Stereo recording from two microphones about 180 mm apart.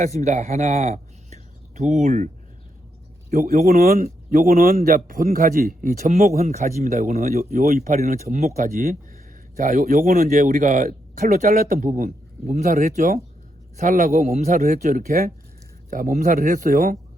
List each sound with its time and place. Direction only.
0.0 s a man's voice: 40° right (ahead or behind)